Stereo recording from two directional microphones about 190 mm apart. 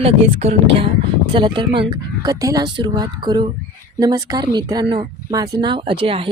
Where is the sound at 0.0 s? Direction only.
35° right (ahead or behind).